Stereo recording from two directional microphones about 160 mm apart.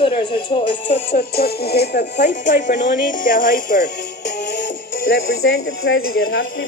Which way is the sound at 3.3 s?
55° left (ahead or behind).